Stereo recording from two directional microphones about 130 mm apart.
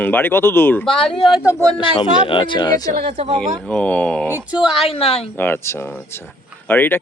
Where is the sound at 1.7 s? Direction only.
40° left (ahead or behind).